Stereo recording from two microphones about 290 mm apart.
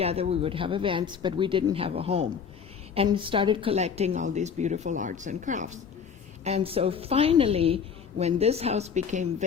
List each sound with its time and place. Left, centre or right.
0.0 s a woman's voice: right